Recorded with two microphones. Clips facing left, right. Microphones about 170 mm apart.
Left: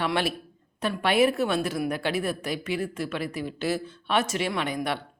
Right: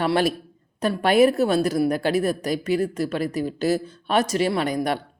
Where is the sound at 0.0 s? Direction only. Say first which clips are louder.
Right 6 dB; 40° right (ahead or behind).